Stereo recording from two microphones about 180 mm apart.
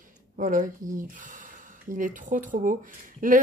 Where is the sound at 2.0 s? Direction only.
45° right (ahead or behind).